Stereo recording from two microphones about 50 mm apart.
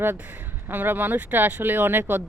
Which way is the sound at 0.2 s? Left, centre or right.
Right.